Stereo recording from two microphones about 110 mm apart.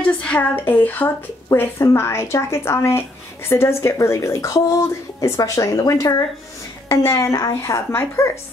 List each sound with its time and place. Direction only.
0.0 s a woman's voice: 10° left (ahead or behind)